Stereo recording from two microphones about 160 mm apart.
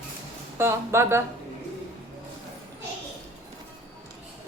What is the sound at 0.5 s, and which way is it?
Speech, 15° right (ahead or behind).